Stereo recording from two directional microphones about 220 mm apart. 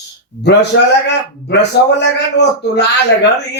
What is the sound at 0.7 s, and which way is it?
A man's voice, 55° left (ahead or behind).